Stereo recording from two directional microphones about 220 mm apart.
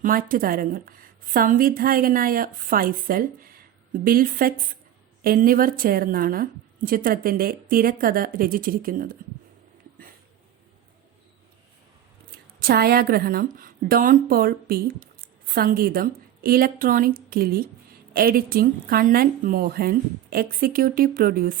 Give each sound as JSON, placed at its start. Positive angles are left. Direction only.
{"t": 0.0, "sound": "a woman's voice", "side_deg": -40}
{"t": 12.3, "sound": "a woman's voice", "side_deg": -45}